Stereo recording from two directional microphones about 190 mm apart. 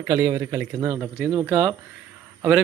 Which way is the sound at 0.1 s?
10° right (ahead or behind).